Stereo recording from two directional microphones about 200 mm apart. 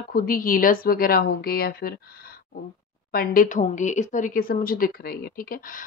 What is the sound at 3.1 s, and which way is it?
Speech, 45° left (ahead or behind).